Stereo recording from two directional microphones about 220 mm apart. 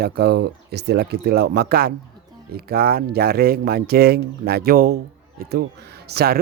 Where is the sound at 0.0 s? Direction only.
45° right (ahead or behind).